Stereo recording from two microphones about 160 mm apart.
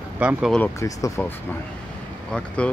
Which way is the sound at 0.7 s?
20° left (ahead or behind).